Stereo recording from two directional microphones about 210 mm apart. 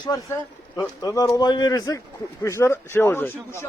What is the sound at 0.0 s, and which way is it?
Speech, 15° left (ahead or behind).